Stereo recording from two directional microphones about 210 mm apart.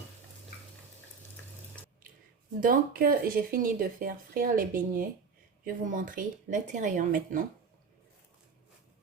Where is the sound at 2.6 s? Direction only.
40° right (ahead or behind).